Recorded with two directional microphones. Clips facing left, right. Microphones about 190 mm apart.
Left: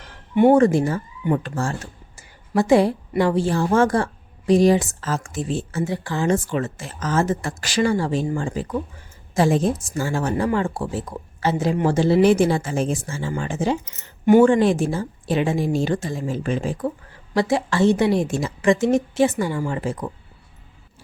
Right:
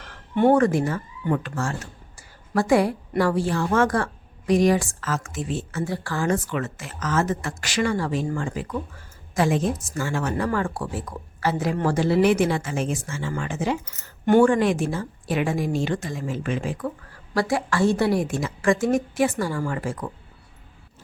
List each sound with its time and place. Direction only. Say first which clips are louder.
0.5 s a woman's voice: left 4 dB; 25° left (ahead or behind)